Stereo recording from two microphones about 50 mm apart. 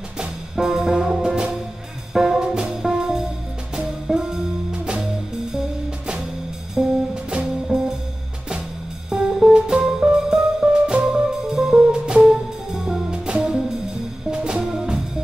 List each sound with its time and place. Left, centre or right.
0.2 s music: centre
6.7 s music: centre
9.1 s music: centre